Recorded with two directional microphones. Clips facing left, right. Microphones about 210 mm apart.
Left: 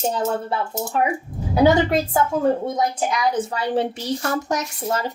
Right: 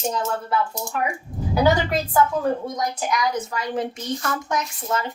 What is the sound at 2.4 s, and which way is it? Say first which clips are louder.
Speech: left 4 dB; 25° left (ahead or behind).